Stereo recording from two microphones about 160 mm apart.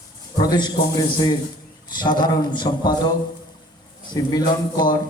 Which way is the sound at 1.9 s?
25° left (ahead or behind).